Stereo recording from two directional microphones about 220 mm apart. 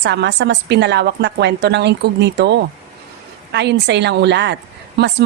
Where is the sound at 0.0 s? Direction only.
50° right (ahead or behind).